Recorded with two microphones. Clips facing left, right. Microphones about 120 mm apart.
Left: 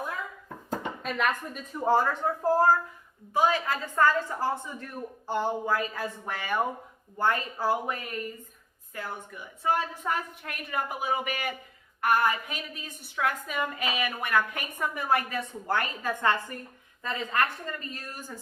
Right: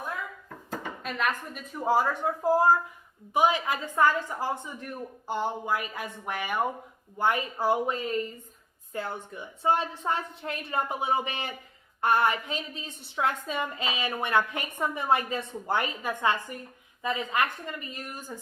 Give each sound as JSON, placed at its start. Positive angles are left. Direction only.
{"t": 1.0, "sound": "a woman's voice", "side_deg": 0}